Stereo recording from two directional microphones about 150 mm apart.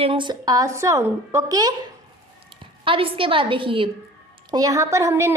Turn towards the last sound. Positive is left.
turn(degrees=-20)  # may be behind; listen again after turning